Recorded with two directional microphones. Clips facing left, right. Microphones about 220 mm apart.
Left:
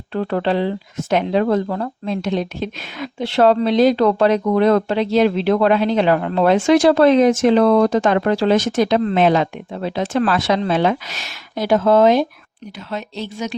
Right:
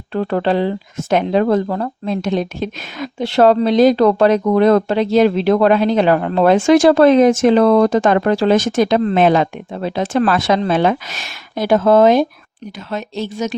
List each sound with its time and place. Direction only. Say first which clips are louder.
0.1 s a woman's voice: right 2 dB; 45° right (ahead or behind)